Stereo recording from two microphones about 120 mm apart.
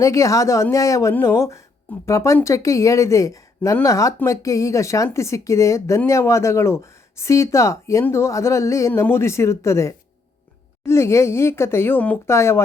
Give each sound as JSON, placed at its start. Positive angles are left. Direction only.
{"t": 0.0, "sound": "speech", "side_deg": 25}